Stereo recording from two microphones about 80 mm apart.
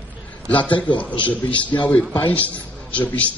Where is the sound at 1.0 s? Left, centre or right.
Centre.